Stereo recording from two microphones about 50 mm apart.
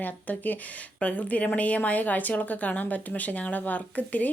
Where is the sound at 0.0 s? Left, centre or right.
Left.